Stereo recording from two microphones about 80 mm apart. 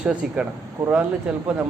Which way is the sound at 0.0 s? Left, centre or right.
Centre.